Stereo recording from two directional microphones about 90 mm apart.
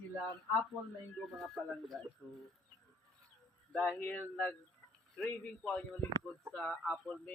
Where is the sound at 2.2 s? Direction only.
10° left (ahead or behind).